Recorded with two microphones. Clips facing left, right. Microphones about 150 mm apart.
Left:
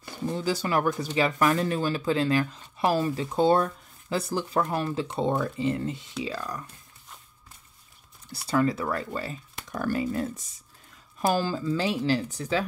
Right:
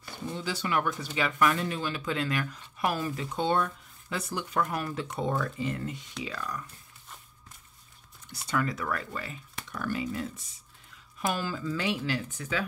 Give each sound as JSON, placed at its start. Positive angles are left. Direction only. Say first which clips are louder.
{"t": 0.3, "sound": "speech", "louder": "left 4 dB", "side_deg": 40}
{"t": 8.3, "sound": "speech", "louder": "left 6 dB", "side_deg": 30}